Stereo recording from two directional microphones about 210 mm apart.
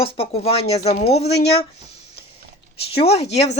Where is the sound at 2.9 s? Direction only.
30° left (ahead or behind).